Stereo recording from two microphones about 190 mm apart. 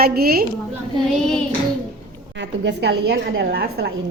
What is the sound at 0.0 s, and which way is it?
Speech, 50° right (ahead or behind).